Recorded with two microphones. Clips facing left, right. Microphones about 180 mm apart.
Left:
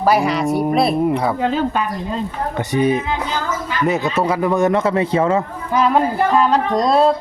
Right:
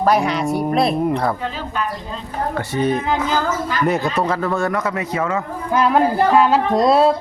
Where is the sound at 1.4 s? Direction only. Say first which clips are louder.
Left 8 dB; 65° left (ahead or behind).